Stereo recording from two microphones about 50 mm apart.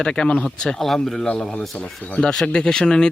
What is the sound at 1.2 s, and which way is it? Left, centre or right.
A man's voice, centre.